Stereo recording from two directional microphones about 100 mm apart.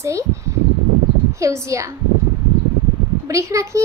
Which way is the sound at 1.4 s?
30° right (ahead or behind).